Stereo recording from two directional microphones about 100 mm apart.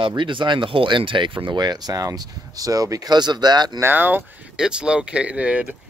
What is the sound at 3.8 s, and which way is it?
Speech, 20° right (ahead or behind).